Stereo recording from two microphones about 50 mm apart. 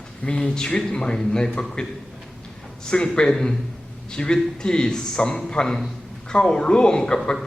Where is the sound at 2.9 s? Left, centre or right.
Centre.